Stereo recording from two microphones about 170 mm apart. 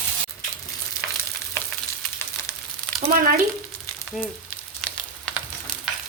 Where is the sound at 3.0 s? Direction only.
55° right (ahead or behind).